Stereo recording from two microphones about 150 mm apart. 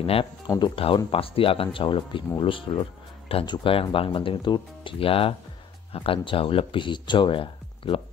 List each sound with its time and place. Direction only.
0.0 s speech: 40° left (ahead or behind)